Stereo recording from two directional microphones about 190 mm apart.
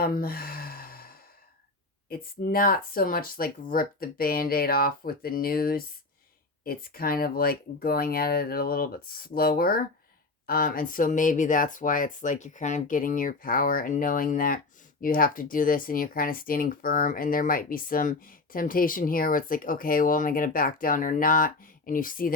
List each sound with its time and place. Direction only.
0.0 s sigh: 50° left (ahead or behind)
2.0 s speech: 50° left (ahead or behind)